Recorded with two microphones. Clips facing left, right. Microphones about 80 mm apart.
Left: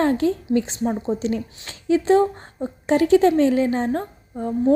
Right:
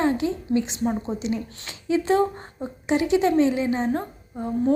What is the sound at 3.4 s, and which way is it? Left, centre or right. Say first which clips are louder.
Speech: left 3 dB; left.